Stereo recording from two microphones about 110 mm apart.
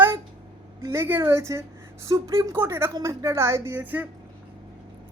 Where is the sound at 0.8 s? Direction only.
25° right (ahead or behind).